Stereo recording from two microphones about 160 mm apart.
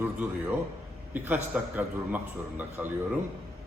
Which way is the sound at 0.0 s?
10° right (ahead or behind).